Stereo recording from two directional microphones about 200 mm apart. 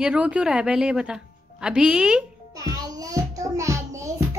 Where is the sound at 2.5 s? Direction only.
20° right (ahead or behind).